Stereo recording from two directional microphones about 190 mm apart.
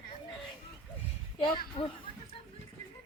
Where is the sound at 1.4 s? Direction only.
25° left (ahead or behind).